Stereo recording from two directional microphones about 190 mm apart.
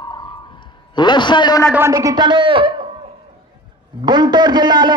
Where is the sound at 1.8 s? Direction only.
15° right (ahead or behind).